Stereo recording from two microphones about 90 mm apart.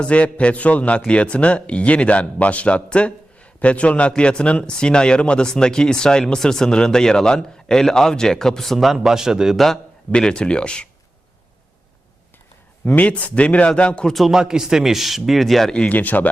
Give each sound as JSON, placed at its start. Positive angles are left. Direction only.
{"t": 0.0, "sound": "a man's voice", "side_deg": 15}
{"t": 10.1, "sound": "a man's voice", "side_deg": 10}
{"t": 13.0, "sound": "a man's voice", "side_deg": 15}